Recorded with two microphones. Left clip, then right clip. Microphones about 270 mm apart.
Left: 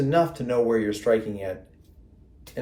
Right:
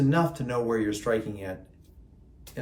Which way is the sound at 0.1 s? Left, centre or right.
Centre.